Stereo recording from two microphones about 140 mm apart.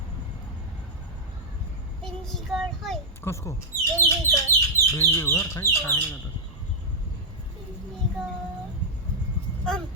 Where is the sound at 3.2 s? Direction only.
20° left (ahead or behind).